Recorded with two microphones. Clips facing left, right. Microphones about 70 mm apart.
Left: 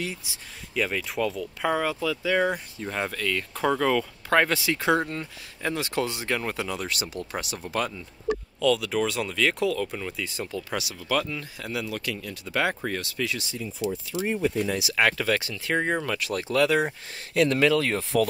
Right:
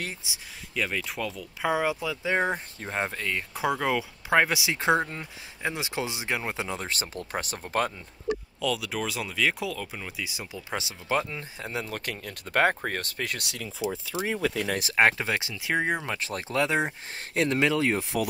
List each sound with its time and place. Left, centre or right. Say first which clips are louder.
0.2 s speech: right 2 dB; right
0.7 s speech: left 3 dB; centre; by 3.4 s right
3.5 s speech: left 3 dB; centre
4.7 s speech: right 2 dB; right
8.5 s speech: left 6 dB; centre
10.7 s speech: right 1 dB; right
13.8 s speech: left 1 dB; centre
14.2 s speech: left 3 dB; right
14.7 s speech: right 1 dB; right; by 16.1 s centre
16.1 s speech: left 4 dB; right